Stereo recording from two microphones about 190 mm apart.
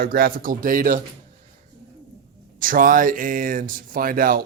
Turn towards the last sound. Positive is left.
turn(degrees=-50)  # may be behind; listen again after turning